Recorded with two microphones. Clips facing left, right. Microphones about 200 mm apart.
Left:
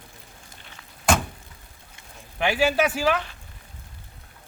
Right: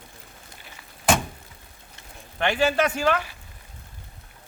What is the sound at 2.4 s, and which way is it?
Speech, 5° left (ahead or behind).